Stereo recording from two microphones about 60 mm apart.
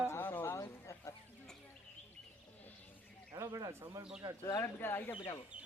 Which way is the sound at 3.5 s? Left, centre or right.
Right.